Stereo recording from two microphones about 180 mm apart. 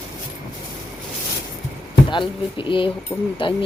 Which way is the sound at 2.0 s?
25° left (ahead or behind).